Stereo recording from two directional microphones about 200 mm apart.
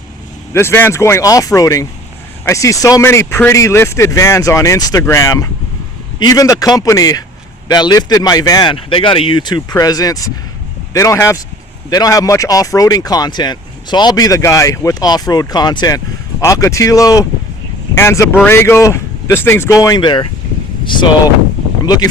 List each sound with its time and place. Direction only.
0.5 s speech: 10° left (ahead or behind)